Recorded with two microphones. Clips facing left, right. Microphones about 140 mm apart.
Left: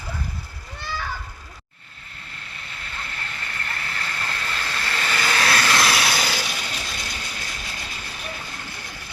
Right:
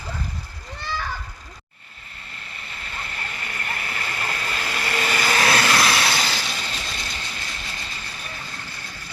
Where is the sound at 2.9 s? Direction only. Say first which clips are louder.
Right 1 dB; 5° right (ahead or behind).